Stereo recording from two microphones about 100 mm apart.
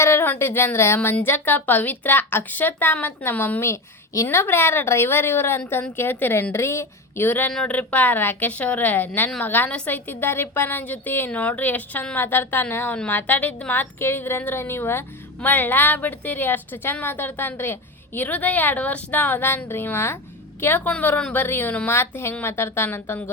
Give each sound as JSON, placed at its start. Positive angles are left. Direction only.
{"t": 0.0, "sound": "a woman's voice", "side_deg": 25}